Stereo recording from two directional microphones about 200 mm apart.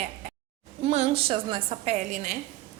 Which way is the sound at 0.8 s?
30° right (ahead or behind).